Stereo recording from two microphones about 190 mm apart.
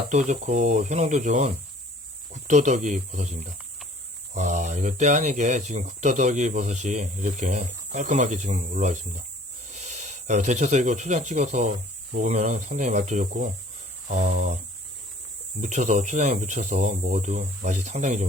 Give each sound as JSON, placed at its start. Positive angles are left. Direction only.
{"t": 0.1, "sound": "speech", "side_deg": -40}
{"t": 15.6, "sound": "speech", "side_deg": -40}